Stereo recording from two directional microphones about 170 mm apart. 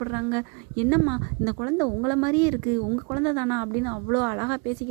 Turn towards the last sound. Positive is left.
turn(degrees=-20)  # may be behind; listen again after turning